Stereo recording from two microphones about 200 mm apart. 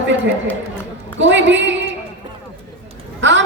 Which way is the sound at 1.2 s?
65° right (ahead or behind).